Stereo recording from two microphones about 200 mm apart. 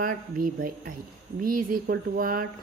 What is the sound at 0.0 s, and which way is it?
A woman's voice, 45° right (ahead or behind).